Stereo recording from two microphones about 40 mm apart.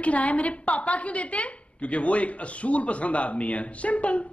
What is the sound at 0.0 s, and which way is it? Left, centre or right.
Speech, left.